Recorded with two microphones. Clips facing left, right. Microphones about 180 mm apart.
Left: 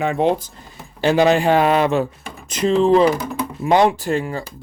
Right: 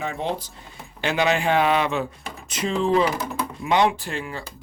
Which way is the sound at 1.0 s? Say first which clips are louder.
Left 7 dB; 35° left (ahead or behind).